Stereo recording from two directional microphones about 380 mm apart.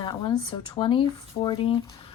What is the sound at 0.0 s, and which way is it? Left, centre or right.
Speech, centre.